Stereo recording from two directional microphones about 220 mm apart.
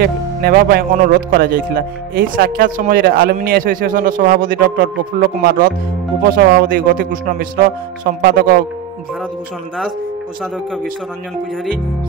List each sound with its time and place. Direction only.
0.0 s speech: 45° right (ahead or behind)